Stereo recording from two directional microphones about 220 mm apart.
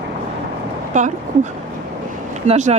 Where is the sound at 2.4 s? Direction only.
30° right (ahead or behind).